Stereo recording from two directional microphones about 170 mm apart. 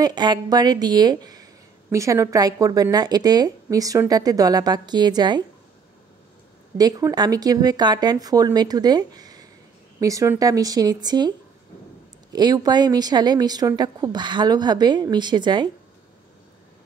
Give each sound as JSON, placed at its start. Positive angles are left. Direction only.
{"t": 0.0, "sound": "speech", "side_deg": -25}
{"t": 6.8, "sound": "speech", "side_deg": -20}